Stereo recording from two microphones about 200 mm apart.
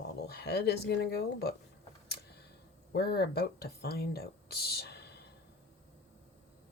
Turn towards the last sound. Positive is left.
turn(degrees=55)  # may be behind; listen again after turning